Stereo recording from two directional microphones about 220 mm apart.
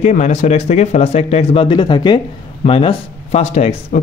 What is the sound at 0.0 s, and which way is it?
A man's voice, 35° left (ahead or behind).